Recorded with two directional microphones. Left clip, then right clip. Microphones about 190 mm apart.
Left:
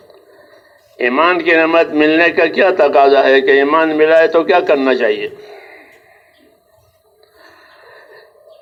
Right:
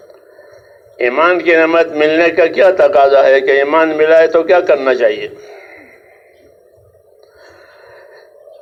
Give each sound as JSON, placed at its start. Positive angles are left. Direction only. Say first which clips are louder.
{"t": 0.1, "sound": "speech", "louder": "right 3 dB", "side_deg": -35}
{"t": 7.4, "sound": "snort", "louder": "right 1 dB", "side_deg": -35}